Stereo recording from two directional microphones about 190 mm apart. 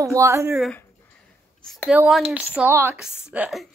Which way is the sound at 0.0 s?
15° right (ahead or behind).